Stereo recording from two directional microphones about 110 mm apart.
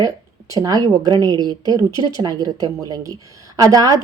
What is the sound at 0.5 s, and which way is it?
A woman's voice, 35° right (ahead or behind).